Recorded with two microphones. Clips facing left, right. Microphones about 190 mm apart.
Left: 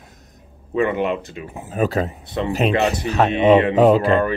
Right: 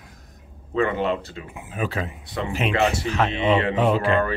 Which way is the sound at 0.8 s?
15° left (ahead or behind).